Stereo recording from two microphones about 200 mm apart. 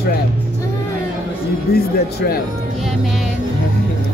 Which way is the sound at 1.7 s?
50° left (ahead or behind).